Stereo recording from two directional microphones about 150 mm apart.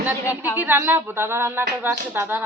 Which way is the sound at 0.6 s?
15° right (ahead or behind).